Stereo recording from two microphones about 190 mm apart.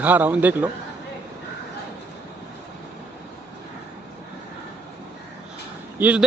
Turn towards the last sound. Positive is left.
turn(degrees=-10)  # may be behind; listen again after turning